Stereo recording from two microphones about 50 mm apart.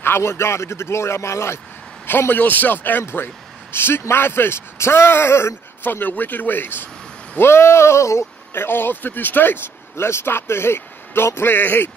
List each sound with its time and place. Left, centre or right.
0.0 s a man's voice: left
2.0 s a man's voice: left
5.9 s speech: left
7.3 s a sound: left
8.5 s speech: left
9.9 s a man's voice: left